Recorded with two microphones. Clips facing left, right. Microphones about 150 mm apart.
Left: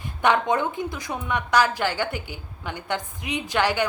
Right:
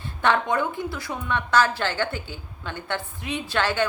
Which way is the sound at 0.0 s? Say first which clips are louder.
Left 1 dB; 15° left (ahead or behind).